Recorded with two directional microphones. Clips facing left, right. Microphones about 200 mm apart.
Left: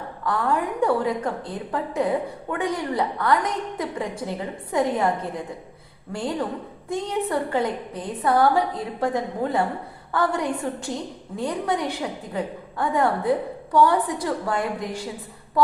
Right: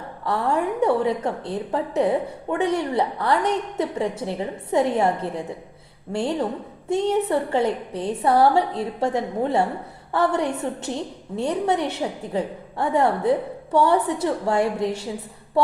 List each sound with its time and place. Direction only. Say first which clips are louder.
0.3 s a woman's voice: right 1 dB; 25° right (ahead or behind)
15.6 s music: left 1 dB; 30° right (ahead or behind)